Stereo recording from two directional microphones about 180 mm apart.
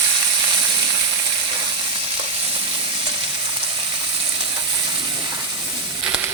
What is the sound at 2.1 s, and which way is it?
Frying, 30° right (ahead or behind).